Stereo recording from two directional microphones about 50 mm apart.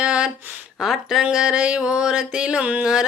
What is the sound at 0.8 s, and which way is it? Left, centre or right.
Speech, centre.